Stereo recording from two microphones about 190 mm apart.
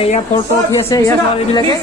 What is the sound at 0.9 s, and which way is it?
Speech, 15° left (ahead or behind).